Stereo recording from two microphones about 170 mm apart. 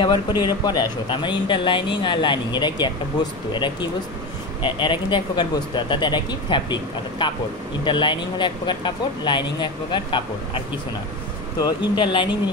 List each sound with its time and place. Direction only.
0.0 s speech: 25° left (ahead or behind)
11.6 s speech: 25° left (ahead or behind)